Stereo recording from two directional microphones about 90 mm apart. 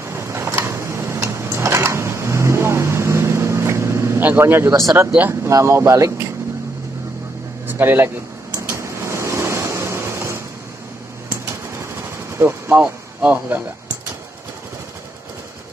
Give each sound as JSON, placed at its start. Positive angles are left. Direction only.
{"t": 0.0, "sound": "a sound", "side_deg": -30}
{"t": 4.2, "sound": "speech", "side_deg": -20}
{"t": 7.6, "sound": "air conditioning", "side_deg": -20}
{"t": 8.5, "sound": "vehicle", "side_deg": -35}
{"t": 12.8, "sound": "speech", "side_deg": -15}